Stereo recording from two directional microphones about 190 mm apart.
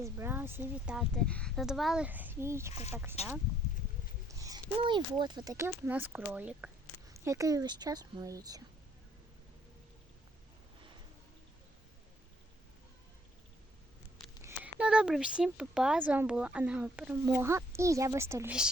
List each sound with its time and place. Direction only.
0.0 s speech: 15° right (ahead or behind)
4.3 s speech: 20° right (ahead or behind)
14.4 s speech: 10° right (ahead or behind)